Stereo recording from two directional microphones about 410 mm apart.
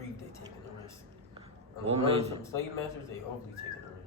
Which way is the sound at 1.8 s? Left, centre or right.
Centre.